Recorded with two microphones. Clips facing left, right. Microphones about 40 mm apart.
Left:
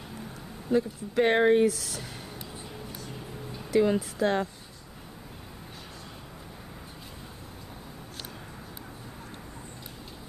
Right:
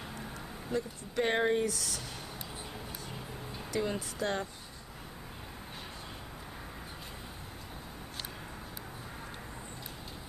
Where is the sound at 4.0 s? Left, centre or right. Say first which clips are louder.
Left 7 dB; centre.